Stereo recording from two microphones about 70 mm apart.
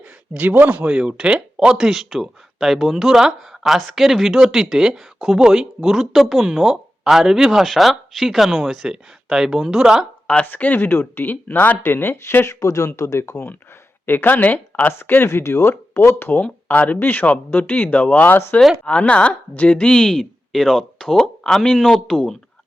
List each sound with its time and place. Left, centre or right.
0.3 s speech: right
0.9 s speech: centre
10.4 s speech: left
12.5 s speech: left
14.1 s speech: left
16.4 s speech: left
18.9 s speech: centre